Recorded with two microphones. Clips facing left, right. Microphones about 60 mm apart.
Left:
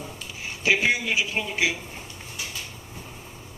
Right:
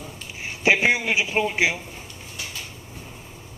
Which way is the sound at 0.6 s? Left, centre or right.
Right.